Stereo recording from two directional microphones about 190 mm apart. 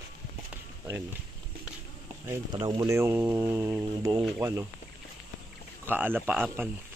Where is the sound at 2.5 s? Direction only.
20° right (ahead or behind).